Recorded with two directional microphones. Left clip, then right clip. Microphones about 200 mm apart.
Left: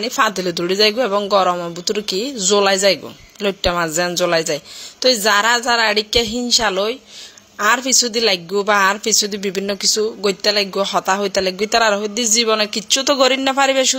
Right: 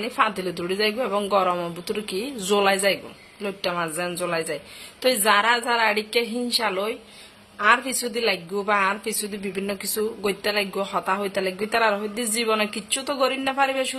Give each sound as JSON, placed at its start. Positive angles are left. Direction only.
{"t": 0.0, "sound": "speech", "side_deg": 30}